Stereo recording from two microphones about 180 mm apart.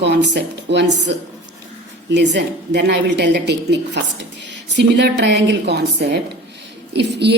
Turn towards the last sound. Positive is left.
turn(degrees=-70)  # may be behind; listen again after turning